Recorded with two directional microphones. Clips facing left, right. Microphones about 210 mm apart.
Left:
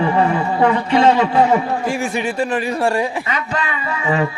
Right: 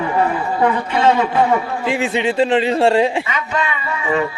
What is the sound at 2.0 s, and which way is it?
Speech, 25° right (ahead or behind).